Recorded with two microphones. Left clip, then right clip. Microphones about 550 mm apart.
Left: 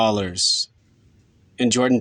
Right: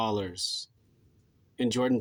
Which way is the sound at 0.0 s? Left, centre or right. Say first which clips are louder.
Left 11 dB; centre.